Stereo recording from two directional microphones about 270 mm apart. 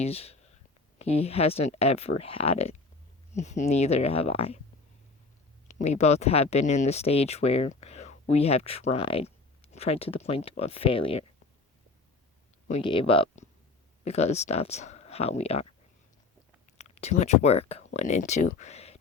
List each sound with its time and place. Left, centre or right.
0.0 s speech: left
5.6 s speech: left
12.6 s speech: left
16.7 s speech: left